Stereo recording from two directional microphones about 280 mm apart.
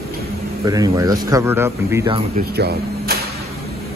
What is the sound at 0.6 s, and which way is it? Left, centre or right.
Speech, centre.